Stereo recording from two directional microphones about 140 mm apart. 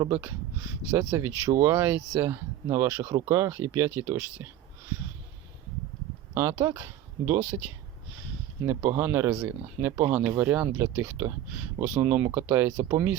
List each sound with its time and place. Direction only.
0.0 s speech: 15° right (ahead or behind)
6.3 s speech: 20° right (ahead or behind)
9.3 s speech: 5° right (ahead or behind)